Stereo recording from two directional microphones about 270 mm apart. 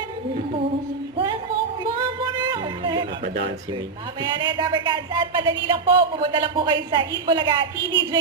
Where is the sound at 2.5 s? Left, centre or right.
Centre.